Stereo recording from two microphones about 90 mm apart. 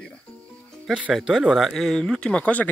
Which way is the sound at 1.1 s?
5° right (ahead or behind).